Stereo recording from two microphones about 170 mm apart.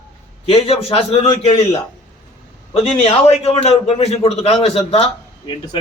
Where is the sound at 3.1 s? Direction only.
35° left (ahead or behind).